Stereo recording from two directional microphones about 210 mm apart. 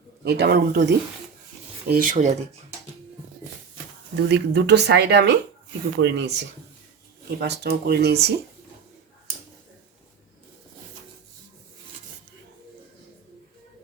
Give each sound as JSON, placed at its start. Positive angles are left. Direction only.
{"t": 0.3, "sound": "speech", "side_deg": -50}
{"t": 1.9, "sound": "speech", "side_deg": -40}
{"t": 4.1, "sound": "speech", "side_deg": -55}
{"t": 7.3, "sound": "speech", "side_deg": -50}